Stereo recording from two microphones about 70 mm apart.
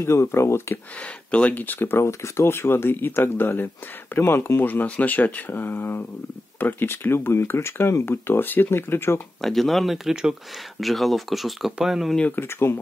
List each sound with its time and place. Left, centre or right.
0.0 s speech: left
0.9 s speech: centre; by 9.2 s left
9.4 s speech: centre
12.4 s speech: left